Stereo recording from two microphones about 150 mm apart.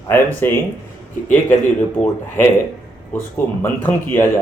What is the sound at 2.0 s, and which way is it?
Speech, 15° left (ahead or behind).